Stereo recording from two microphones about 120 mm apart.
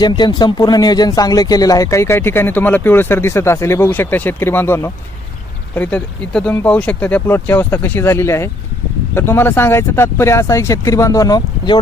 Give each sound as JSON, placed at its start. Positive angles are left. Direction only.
{"t": 0.0, "sound": "speech", "side_deg": 35}